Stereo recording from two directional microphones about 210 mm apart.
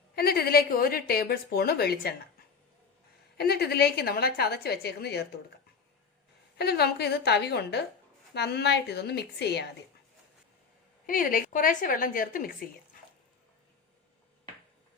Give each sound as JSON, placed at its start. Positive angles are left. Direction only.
{"t": 0.2, "sound": "a woman's voice", "side_deg": 45}
{"t": 3.3, "sound": "a woman's voice", "side_deg": 50}
{"t": 6.6, "sound": "a woman's voice", "side_deg": 50}
{"t": 11.0, "sound": "speech", "side_deg": 40}